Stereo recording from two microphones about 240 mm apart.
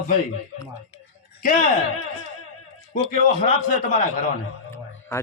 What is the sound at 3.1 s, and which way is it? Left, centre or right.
A man's voice, left.